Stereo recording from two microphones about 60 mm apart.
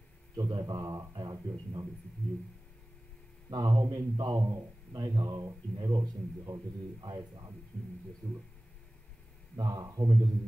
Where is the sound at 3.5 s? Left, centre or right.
Right.